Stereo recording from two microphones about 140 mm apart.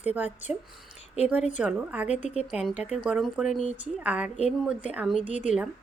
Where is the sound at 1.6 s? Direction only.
10° right (ahead or behind).